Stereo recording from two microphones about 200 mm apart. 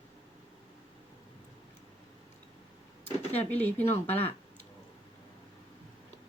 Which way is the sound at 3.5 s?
10° left (ahead or behind).